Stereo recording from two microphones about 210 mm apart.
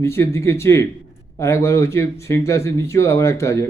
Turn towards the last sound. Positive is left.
turn(degrees=15)  # may be behind; listen again after turning